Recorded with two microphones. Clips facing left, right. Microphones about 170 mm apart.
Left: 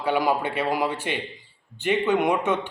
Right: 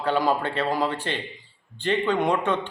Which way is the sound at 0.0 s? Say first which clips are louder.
Even; 10° left (ahead or behind).